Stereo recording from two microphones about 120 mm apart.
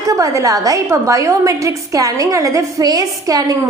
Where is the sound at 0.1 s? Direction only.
30° right (ahead or behind).